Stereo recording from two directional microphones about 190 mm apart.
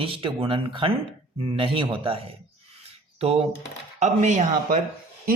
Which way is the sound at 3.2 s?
30° right (ahead or behind).